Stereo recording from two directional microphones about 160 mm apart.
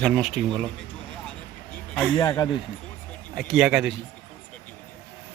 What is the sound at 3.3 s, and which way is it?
Speech, centre (ahead or behind).